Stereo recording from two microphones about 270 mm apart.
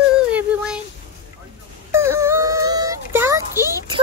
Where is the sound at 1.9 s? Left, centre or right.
Centre.